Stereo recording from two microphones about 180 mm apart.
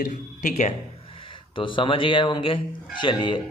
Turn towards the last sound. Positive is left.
turn(degrees=25)  # may be behind; listen again after turning